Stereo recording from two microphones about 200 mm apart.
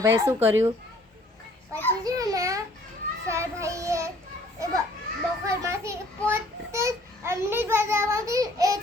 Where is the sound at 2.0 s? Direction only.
20° right (ahead or behind).